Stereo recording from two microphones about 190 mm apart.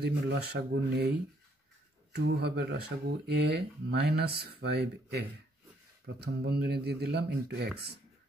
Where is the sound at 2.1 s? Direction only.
60° right (ahead or behind).